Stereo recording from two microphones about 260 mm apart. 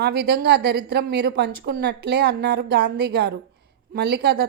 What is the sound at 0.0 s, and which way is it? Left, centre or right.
A woman's voice, right.